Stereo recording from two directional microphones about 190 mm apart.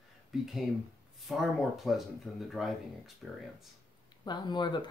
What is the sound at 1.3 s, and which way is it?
Speech, centre (ahead or behind).